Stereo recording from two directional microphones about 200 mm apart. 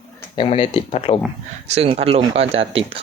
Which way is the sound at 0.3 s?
25° left (ahead or behind).